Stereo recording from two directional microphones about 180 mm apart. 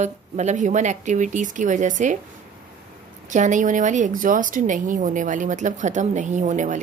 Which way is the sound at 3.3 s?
45° right (ahead or behind).